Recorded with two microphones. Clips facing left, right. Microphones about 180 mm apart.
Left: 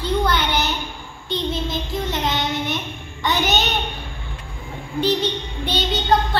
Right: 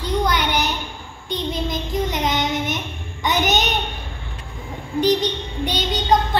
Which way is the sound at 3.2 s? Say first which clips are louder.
Right 1 dB; 20° right (ahead or behind).